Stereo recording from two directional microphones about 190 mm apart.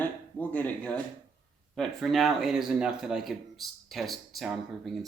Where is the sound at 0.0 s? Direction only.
10° left (ahead or behind).